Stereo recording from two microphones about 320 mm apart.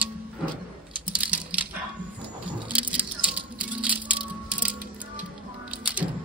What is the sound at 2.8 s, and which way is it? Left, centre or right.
Music, centre.